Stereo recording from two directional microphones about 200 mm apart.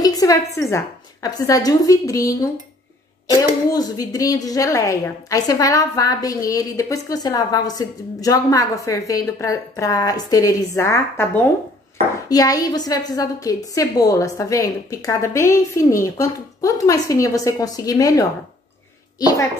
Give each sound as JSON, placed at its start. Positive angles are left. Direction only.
{"t": 0.0, "sound": "a woman's voice", "side_deg": 20}
{"t": 3.7, "sound": "a woman's voice", "side_deg": 20}